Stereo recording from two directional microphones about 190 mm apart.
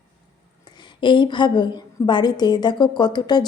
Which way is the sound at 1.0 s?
25° left (ahead or behind).